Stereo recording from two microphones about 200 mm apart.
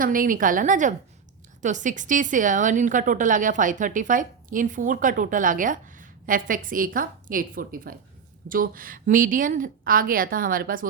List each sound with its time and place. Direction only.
0.0 s a woman's voice: 45° right (ahead or behind)